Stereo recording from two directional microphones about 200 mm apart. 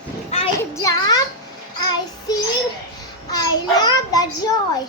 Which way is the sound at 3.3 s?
20° left (ahead or behind).